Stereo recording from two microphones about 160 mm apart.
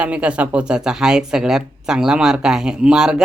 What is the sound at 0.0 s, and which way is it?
Speech, 5° right (ahead or behind).